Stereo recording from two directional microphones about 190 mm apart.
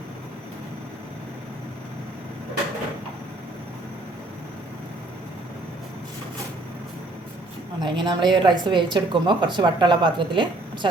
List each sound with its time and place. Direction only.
7.8 s a woman's voice: 25° right (ahead or behind)